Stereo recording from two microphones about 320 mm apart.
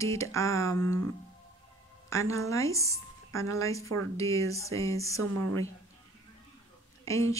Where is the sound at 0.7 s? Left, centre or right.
Right.